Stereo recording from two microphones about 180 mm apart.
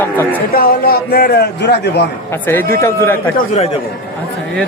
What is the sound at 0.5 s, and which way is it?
A man's voice, 55° left (ahead or behind).